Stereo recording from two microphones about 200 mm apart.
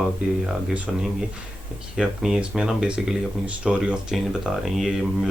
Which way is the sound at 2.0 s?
Centre (ahead or behind).